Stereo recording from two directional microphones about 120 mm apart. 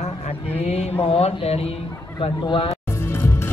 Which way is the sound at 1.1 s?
55° left (ahead or behind).